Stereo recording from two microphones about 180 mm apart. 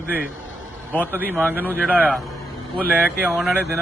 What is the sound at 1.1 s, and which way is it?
Speech, 10° right (ahead or behind).